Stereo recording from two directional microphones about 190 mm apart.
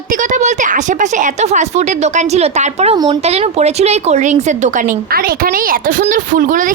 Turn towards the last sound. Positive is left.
turn(degrees=-45)  # may be behind; listen again after turning